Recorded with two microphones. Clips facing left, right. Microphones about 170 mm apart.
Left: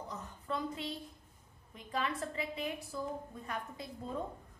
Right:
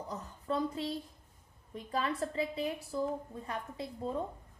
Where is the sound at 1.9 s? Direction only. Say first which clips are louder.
Right 3 dB; 35° right (ahead or behind).